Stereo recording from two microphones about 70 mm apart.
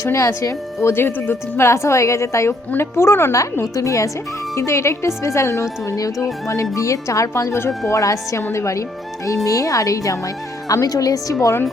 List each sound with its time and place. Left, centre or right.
0.0 s a woman's voice: left
0.9 s a woman's voice: left
11.3 s a woman's voice: left